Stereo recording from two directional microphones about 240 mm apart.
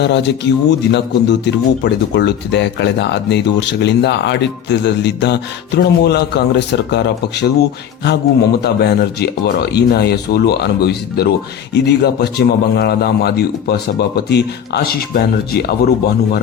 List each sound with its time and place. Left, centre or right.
0.0 s speech: left